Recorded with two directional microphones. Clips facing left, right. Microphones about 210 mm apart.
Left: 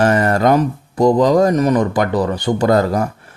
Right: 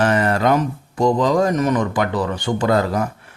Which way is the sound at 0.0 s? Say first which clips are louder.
Left 3 dB; 45° left (ahead or behind).